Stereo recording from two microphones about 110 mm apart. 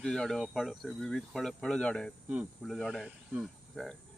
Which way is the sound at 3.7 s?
5° left (ahead or behind).